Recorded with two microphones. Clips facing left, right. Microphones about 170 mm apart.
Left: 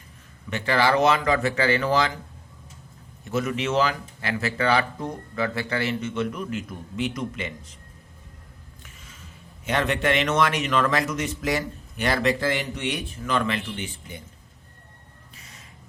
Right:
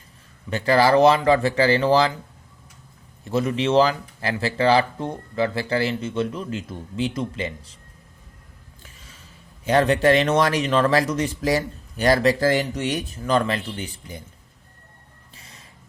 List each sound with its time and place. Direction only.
0.5 s speech: 35° right (ahead or behind)
3.2 s speech: 30° right (ahead or behind)
8.8 s a sound: 35° right (ahead or behind)
9.6 s speech: 35° right (ahead or behind)
15.4 s reversing beeps: 30° right (ahead or behind)